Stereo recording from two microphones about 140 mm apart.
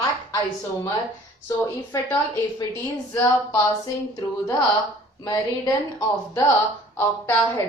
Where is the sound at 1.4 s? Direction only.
25° left (ahead or behind).